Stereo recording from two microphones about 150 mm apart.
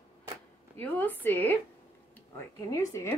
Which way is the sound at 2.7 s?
20° left (ahead or behind).